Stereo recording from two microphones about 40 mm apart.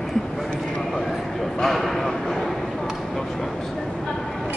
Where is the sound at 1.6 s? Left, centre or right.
Centre.